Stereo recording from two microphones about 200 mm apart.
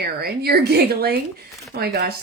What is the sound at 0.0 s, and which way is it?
Speech, 50° right (ahead or behind).